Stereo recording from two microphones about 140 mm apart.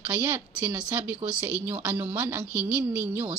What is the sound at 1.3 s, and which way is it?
Speech, 20° left (ahead or behind).